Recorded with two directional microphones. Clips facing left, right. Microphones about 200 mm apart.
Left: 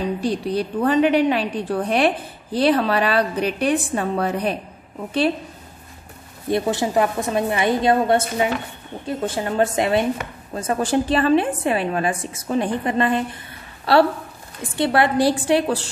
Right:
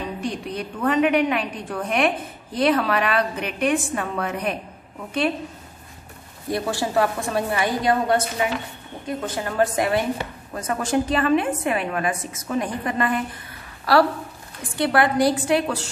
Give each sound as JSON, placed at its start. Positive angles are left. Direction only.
{"t": 0.0, "sound": "a woman's voice", "side_deg": 35}
{"t": 6.5, "sound": "a woman's voice", "side_deg": 20}